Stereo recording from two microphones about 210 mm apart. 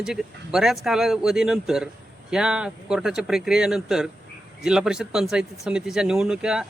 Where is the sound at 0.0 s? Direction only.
Centre (ahead or behind).